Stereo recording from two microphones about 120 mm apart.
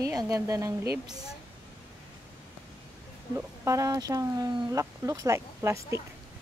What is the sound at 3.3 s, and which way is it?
Speech, 25° right (ahead or behind).